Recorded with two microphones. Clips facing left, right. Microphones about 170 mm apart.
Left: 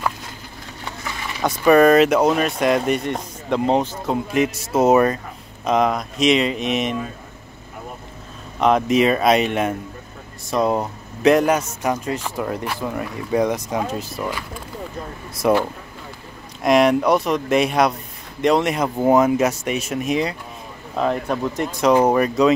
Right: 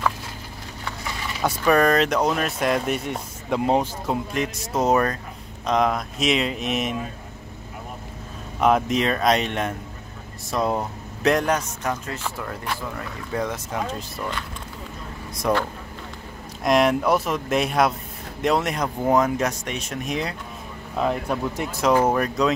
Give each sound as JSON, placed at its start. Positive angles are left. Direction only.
{"t": 1.6, "sound": "speech", "side_deg": 5}
{"t": 4.3, "sound": "speech", "side_deg": 5}
{"t": 8.5, "sound": "speech", "side_deg": -5}
{"t": 15.4, "sound": "speech", "side_deg": 10}
{"t": 16.6, "sound": "speech", "side_deg": 0}